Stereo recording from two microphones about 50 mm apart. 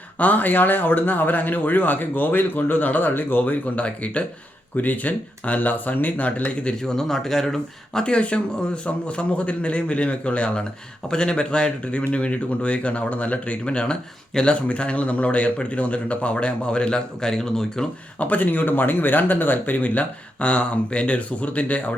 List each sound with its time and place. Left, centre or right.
0.2 s speech: left
6.8 s speech: centre
18.2 s speech: left